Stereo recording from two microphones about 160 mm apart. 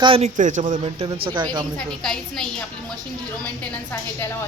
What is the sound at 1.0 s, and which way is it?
Speech, 30° right (ahead or behind).